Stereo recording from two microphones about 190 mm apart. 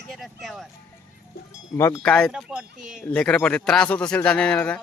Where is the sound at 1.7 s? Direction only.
15° left (ahead or behind).